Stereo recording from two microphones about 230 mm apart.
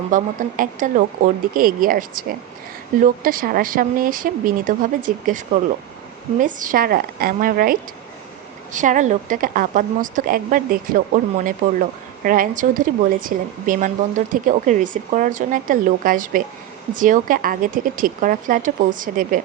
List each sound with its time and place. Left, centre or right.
0.1 s a woman's voice: right
6.4 s a woman's voice: right